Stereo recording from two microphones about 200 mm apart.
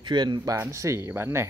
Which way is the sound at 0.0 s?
20° right (ahead or behind).